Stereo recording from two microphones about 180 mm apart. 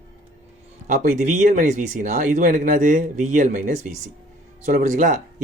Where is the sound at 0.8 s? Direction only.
45° right (ahead or behind).